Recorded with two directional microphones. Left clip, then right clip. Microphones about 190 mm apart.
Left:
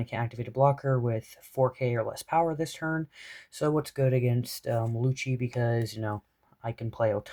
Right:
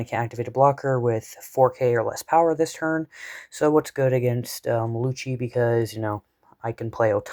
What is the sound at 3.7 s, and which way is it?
Speech, 25° right (ahead or behind).